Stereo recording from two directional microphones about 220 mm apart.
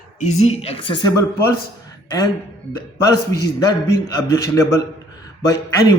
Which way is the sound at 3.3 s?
15° left (ahead or behind).